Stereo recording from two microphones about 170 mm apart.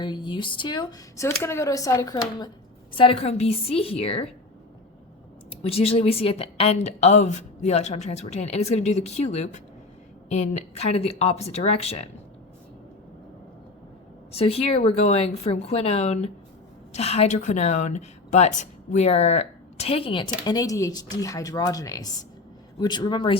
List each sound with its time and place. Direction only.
0.0 s speech: 25° left (ahead or behind)
2.9 s a woman's voice: 30° left (ahead or behind)
5.5 s a woman's voice: 35° left (ahead or behind)
14.3 s a woman's voice: 35° left (ahead or behind)